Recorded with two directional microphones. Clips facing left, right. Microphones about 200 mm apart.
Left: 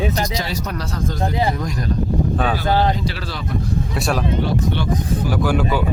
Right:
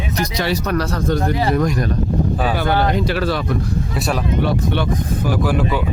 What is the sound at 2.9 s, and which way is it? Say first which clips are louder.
Speech: right 5 dB; 60° right (ahead or behind).